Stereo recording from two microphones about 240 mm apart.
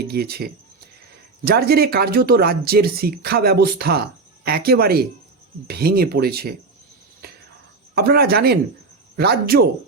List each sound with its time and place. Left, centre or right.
0.0 s speech: right
7.9 s speech: right